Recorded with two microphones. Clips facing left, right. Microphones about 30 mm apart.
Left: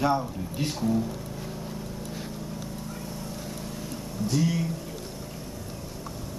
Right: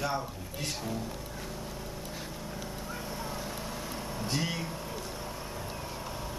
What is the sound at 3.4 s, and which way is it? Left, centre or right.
Vehicle, centre.